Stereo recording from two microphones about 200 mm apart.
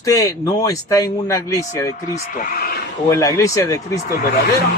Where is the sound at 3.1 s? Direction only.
15° left (ahead or behind).